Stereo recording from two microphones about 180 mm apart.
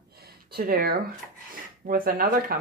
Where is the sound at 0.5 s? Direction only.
60° right (ahead or behind).